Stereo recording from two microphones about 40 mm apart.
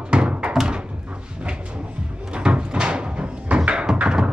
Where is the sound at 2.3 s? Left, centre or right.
Right.